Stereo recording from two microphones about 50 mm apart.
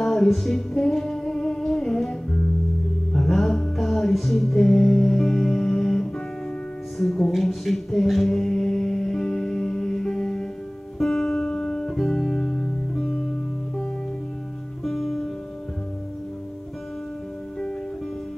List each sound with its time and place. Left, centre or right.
0.0 s music: centre
7.0 s mantra: centre
11.0 s music: centre
14.8 s music: centre